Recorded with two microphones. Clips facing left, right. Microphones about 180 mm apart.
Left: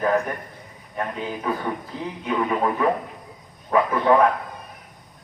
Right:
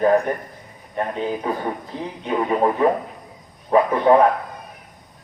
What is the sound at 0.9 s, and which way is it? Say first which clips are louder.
Speech: right 5 dB; 30° right (ahead or behind).